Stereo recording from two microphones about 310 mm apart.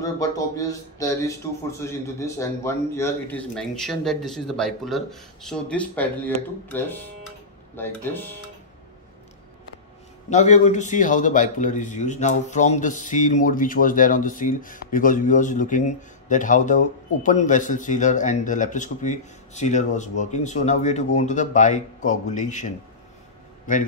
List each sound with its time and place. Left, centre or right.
0.0 s speech: centre
10.3 s speech: left
23.7 s speech: left